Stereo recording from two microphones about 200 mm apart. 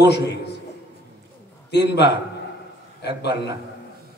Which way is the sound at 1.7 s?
55° left (ahead or behind).